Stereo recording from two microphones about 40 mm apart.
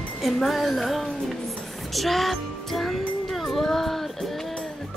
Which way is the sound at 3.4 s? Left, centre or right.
Centre.